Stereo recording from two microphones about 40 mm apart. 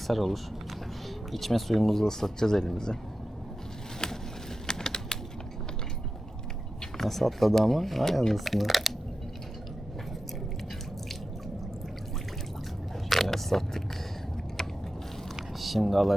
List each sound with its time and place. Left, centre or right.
0.1 s speech: centre
4.6 s typing: centre
6.9 s speech: centre
13.1 s biting: centre
15.5 s speech: centre